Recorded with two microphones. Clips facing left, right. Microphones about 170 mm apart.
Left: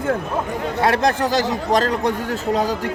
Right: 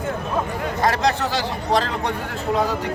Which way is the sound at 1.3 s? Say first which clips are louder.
Left 3 dB; 45° left (ahead or behind).